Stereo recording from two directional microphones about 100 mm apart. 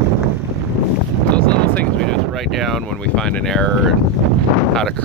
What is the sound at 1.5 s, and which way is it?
Vehicle, 10° left (ahead or behind).